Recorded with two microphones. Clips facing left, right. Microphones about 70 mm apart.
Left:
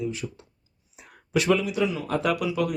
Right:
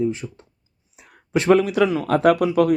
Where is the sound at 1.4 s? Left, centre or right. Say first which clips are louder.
Right 9 dB; right.